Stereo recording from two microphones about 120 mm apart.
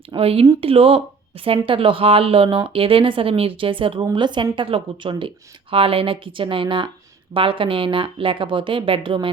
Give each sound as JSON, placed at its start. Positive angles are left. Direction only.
{"t": 0.2, "sound": "speech", "side_deg": -55}